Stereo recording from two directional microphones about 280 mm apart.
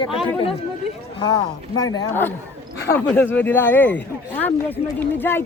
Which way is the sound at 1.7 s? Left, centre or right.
Centre.